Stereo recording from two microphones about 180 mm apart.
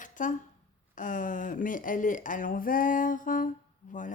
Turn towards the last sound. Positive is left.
turn(degrees=45)  # may be behind; listen again after turning